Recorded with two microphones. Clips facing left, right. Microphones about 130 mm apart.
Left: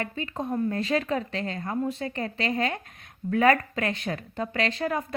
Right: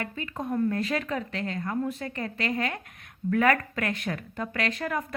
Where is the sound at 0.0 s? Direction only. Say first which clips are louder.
Left 2 dB; 25° left (ahead or behind).